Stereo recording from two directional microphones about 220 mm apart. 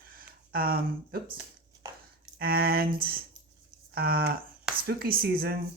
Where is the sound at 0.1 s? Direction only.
40° right (ahead or behind).